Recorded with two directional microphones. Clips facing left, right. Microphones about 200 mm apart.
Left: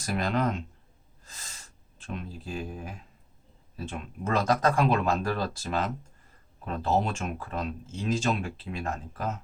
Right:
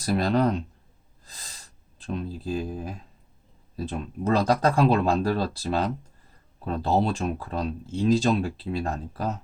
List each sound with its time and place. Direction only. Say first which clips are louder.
0.0 s speech: right 5 dB; 35° right (ahead or behind)
1.2 s sniff: right 1 dB; 35° right (ahead or behind)
3.8 s speech: right 6 dB; 35° right (ahead or behind)